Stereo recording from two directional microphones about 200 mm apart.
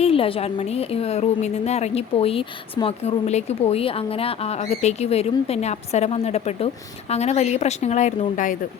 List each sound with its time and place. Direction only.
0.0 s a woman's voice: 30° left (ahead or behind)